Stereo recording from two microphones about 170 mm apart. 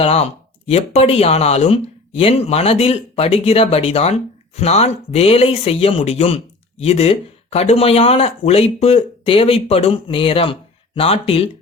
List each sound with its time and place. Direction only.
0.0 s speech: 35° left (ahead or behind)